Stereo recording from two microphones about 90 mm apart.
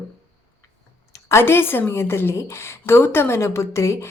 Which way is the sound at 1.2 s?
30° left (ahead or behind).